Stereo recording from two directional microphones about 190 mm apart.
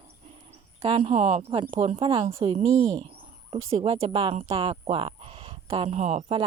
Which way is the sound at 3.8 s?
30° right (ahead or behind).